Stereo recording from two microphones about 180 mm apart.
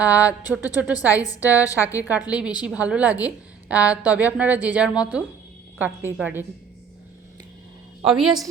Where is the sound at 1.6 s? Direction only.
15° left (ahead or behind).